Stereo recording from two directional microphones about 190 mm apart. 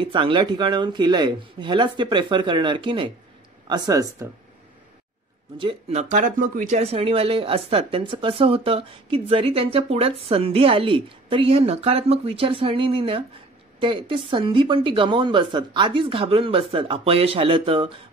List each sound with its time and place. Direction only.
0.0 s speech: 25° right (ahead or behind)
5.6 s speech: 30° right (ahead or behind)